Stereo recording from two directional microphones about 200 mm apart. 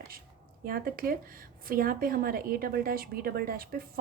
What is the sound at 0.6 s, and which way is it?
Speech, 45° right (ahead or behind).